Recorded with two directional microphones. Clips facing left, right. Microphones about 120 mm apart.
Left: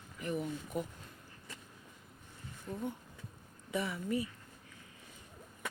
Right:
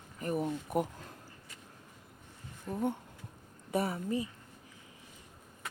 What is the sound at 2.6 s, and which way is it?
Speech, 60° right (ahead or behind).